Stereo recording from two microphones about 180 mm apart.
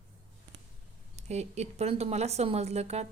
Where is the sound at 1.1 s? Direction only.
35° right (ahead or behind).